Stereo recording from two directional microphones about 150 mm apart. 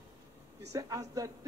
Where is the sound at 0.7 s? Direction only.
20° right (ahead or behind).